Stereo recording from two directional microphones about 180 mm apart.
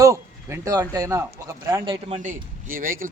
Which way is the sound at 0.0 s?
15° right (ahead or behind).